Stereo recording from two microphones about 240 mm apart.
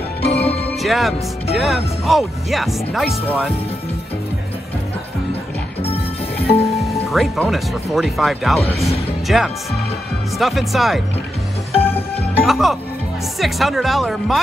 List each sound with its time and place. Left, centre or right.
0.2 s music: left
0.7 s speech: centre
5.9 s music: left
6.9 s speech: centre
11.7 s music: left
12.4 s speech: centre